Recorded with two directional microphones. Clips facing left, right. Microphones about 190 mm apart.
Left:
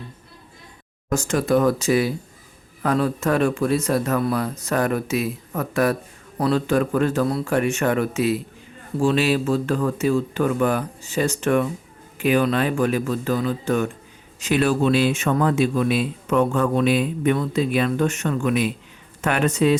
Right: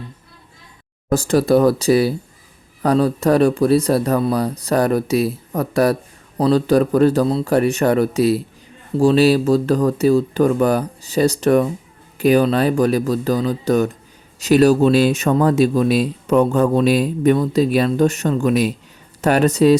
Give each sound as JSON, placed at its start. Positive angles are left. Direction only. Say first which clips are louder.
{"t": 1.1, "sound": "speech", "louder": "right 5 dB", "side_deg": -35}